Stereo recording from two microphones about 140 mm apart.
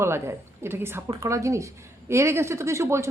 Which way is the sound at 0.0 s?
20° right (ahead or behind).